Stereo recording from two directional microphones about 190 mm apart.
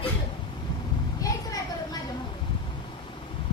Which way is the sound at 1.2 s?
20° left (ahead or behind).